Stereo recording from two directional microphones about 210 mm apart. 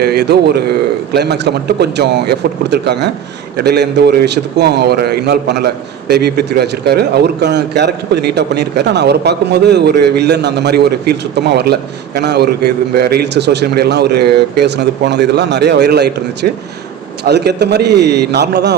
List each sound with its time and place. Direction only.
0.0 s a man's voice: 50° right (ahead or behind)